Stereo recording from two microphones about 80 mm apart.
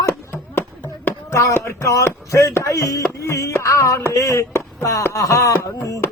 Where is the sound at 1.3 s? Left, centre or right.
Left.